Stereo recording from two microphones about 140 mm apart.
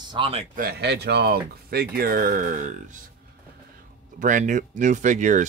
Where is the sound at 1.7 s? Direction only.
90° right; by 3.0 s 65° right (ahead or behind).